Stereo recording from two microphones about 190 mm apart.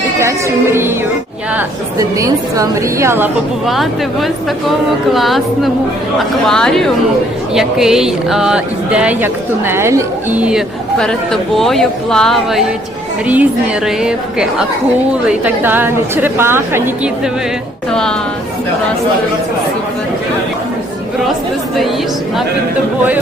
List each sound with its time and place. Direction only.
0.2 s music: 15° right (ahead or behind)
1.5 s a woman's voice: 15° right (ahead or behind)
3.7 s a woman's voice: centre (ahead or behind)